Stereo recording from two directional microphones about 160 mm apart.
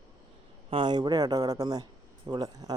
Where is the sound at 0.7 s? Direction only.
30° right (ahead or behind).